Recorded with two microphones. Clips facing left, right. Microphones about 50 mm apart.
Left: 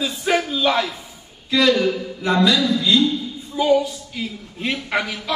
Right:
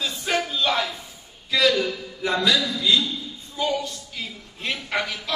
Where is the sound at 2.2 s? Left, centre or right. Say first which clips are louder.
Left 5 dB; left.